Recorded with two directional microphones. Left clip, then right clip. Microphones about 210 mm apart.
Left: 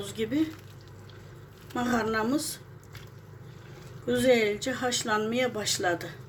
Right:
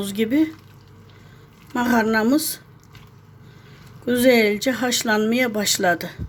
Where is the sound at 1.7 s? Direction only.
50° right (ahead or behind).